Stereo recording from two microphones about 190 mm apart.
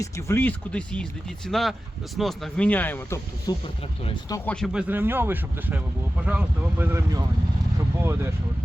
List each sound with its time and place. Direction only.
0.0 s speech: 10° left (ahead or behind)
4.0 s speech: 25° left (ahead or behind)
4.4 s speech: centre (ahead or behind); by 7.3 s 15° right (ahead or behind)